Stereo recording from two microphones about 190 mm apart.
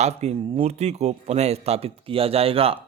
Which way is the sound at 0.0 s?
35° right (ahead or behind).